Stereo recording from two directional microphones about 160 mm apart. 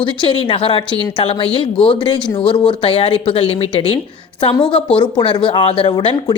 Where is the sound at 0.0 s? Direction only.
30° left (ahead or behind).